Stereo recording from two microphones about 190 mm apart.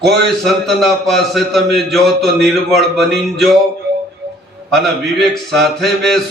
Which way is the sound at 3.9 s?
60° right (ahead or behind).